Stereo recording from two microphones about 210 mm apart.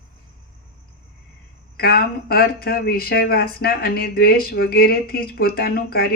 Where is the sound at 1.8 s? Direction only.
45° left (ahead or behind).